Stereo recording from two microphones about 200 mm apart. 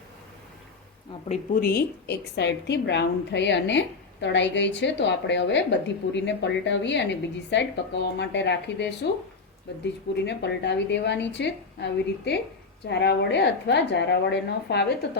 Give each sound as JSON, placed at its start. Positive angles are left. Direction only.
{"t": 1.6, "sound": "a woman's voice", "side_deg": 55}